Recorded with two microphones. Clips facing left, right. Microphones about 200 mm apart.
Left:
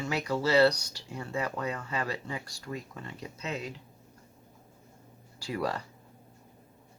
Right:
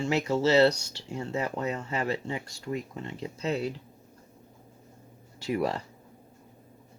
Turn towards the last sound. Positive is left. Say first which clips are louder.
# right 4 dB
turn(degrees=-25)  # may be behind; listen again after turning